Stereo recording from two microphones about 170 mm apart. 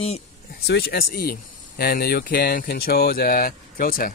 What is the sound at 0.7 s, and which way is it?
Speech, 65° left (ahead or behind).